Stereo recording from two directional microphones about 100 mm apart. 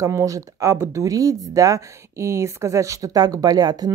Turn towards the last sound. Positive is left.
turn(degrees=-40)  # may be behind; listen again after turning